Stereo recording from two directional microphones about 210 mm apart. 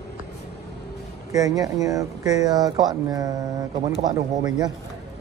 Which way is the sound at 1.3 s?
15° right (ahead or behind).